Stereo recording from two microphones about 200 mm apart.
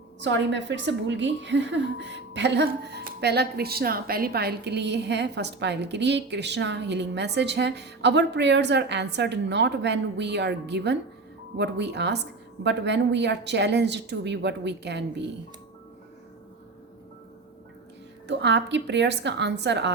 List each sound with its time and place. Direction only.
0.2 s a woman's voice: 65° right (ahead or behind)
18.3 s a woman's voice: 60° right (ahead or behind)